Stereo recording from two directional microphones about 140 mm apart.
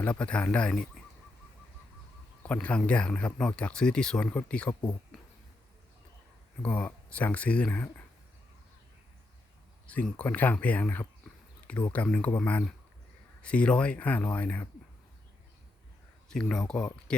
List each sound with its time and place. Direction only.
0.0 s speech: 10° left (ahead or behind)
2.4 s speech: 10° left (ahead or behind)
5.1 s a sound: centre (ahead or behind)
6.6 s speech: 10° left (ahead or behind)
9.8 s speech: 10° left (ahead or behind)
16.3 s speech: 5° left (ahead or behind)